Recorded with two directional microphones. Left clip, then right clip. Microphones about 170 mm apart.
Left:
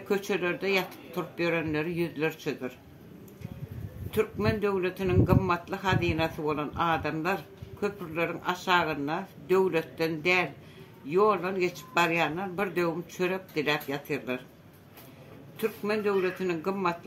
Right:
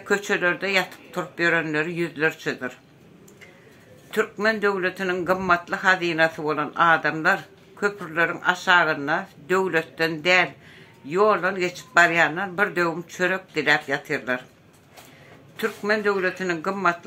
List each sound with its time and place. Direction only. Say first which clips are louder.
0.1 s a man's voice: right 7 dB; 15° right (ahead or behind)
4.1 s a man's voice: right 6 dB; 15° right (ahead or behind)
15.5 s a man's voice: right 6 dB; 15° right (ahead or behind)